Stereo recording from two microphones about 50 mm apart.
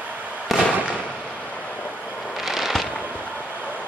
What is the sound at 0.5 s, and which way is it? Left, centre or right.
Fireworks, centre.